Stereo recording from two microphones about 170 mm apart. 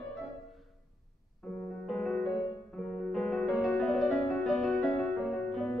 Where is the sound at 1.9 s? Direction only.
5° left (ahead or behind).